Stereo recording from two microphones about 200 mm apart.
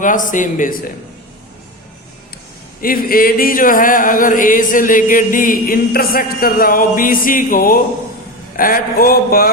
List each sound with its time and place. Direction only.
0.0 s a man's voice: 40° left (ahead or behind)
2.8 s chant: 45° left (ahead or behind)